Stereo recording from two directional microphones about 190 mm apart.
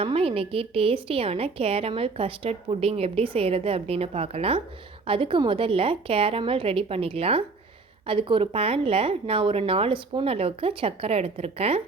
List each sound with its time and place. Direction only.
0.0 s a woman's voice: 30° right (ahead or behind)